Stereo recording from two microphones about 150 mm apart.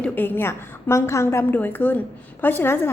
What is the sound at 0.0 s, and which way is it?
A woman's voice, 15° left (ahead or behind).